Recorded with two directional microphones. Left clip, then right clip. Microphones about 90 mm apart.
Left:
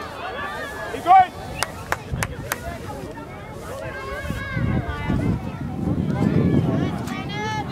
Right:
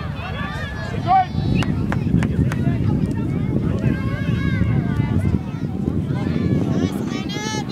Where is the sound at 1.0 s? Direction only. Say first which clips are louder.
Left 3 dB; 40° left (ahead or behind).